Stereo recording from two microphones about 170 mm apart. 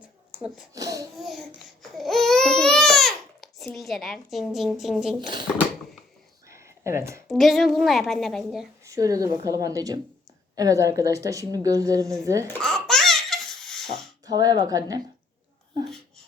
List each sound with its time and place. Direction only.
0.0 s a sound: 5° right (ahead or behind)
0.7 s a woman's voice: 20° right (ahead or behind)
1.2 s babbling: centre (ahead or behind)
5.2 s a woman's voice: 25° right (ahead or behind)
6.5 s a sound: 15° right (ahead or behind)
7.3 s a woman's voice: centre (ahead or behind)
8.8 s a woman's voice: 20° right (ahead or behind)
12.6 s laughter: centre (ahead or behind)
14.3 s a woman's voice: 20° right (ahead or behind)